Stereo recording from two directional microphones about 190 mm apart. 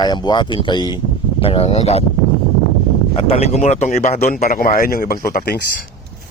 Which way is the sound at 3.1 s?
30° left (ahead or behind).